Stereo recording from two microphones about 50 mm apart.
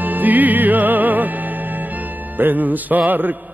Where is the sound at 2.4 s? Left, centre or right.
Right.